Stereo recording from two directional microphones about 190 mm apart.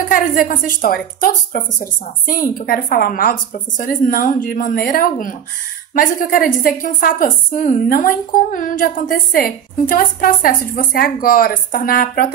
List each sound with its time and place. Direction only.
0.1 s a woman's voice: 45° left (ahead or behind)